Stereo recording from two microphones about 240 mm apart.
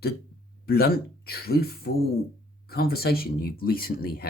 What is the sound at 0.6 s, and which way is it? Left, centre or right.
Speech, left.